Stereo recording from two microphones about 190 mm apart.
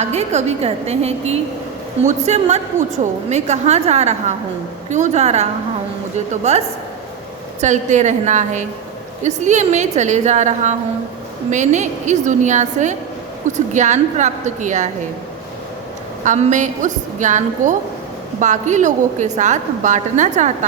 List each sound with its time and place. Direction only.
0.0 s a woman's voice: 35° right (ahead or behind)
7.6 s a woman's voice: 40° right (ahead or behind)
16.2 s a woman's voice: 40° right (ahead or behind)